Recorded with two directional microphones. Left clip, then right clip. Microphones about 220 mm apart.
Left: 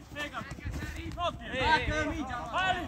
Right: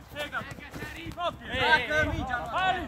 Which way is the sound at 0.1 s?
15° right (ahead or behind).